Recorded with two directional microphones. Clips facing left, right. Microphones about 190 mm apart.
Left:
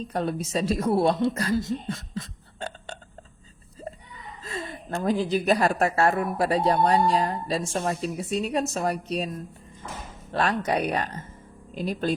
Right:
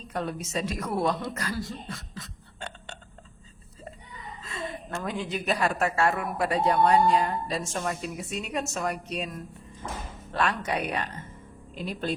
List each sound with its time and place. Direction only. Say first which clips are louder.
0.1 s a woman's voice: left 3 dB; 35° left (ahead or behind)
4.4 s a woman's voice: left 2 dB; 35° left (ahead or behind)